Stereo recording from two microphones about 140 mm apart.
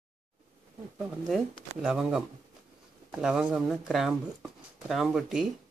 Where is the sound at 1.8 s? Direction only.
5° right (ahead or behind).